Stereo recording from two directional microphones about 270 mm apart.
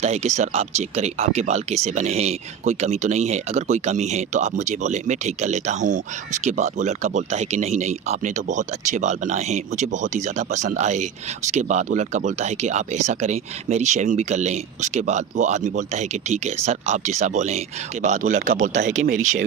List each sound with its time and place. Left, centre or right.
0.0 s speech: right